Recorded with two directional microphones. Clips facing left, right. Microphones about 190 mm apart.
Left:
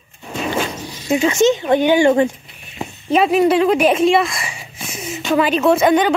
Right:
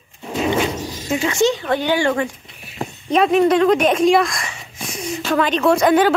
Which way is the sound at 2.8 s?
5° left (ahead or behind).